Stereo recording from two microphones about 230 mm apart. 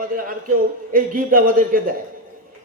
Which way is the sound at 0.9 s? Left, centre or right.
Right.